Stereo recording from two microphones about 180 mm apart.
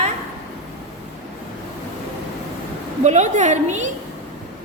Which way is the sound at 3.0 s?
40° right (ahead or behind).